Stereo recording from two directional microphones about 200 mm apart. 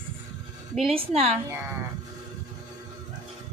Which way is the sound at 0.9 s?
30° right (ahead or behind).